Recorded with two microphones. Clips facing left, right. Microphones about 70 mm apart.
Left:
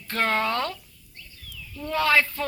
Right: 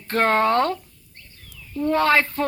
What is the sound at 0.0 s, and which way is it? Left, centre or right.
Speech, right.